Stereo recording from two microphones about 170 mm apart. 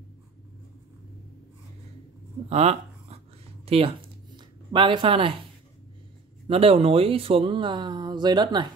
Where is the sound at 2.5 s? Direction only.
35° right (ahead or behind).